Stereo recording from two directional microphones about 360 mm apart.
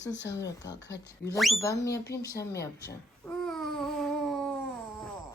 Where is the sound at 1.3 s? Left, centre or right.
Centre.